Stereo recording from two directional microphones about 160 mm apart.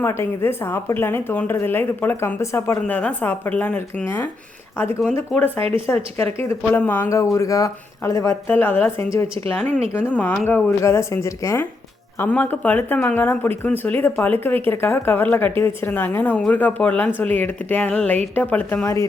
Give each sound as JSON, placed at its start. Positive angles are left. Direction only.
{"t": 0.0, "sound": "speech", "side_deg": 15}